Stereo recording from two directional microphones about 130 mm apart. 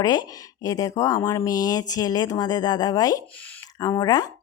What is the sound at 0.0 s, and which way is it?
Speech, 30° left (ahead or behind).